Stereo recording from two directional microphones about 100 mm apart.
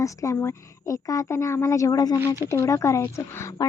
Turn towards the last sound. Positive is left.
turn(degrees=30)  # may be behind; listen again after turning